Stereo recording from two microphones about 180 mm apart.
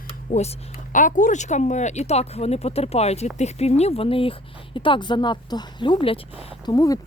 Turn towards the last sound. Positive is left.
turn(degrees=20)  # may be behind; listen again after turning